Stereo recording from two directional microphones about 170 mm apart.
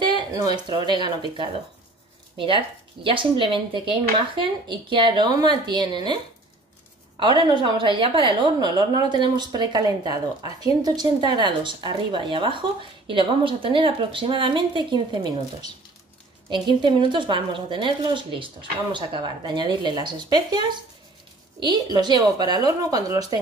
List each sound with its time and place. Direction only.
0.1 s a woman's voice: 25° right (ahead or behind)
7.2 s a woman's voice: 25° right (ahead or behind)